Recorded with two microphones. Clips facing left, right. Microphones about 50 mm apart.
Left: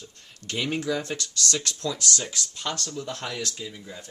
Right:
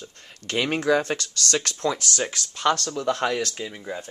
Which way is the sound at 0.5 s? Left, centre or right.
Right.